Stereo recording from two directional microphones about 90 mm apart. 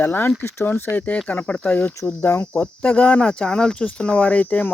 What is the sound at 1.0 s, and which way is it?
Speech, 15° left (ahead or behind).